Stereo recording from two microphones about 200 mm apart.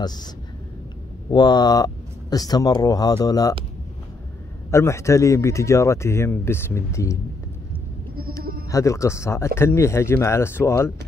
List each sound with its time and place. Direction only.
0.0 s speech: 20° left (ahead or behind)
1.3 s speech: 20° left (ahead or behind)
4.6 s speech: 15° left (ahead or behind)
8.6 s speech: 15° left (ahead or behind)